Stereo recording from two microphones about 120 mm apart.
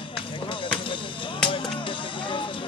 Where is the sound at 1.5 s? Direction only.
45° left (ahead or behind).